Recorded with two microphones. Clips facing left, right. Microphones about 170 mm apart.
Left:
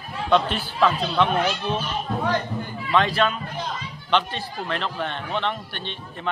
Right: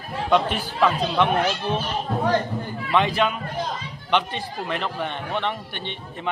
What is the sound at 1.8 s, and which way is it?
Speech, 35° right (ahead or behind).